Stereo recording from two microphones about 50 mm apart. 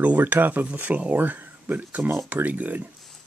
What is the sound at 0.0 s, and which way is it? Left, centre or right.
Speech, right.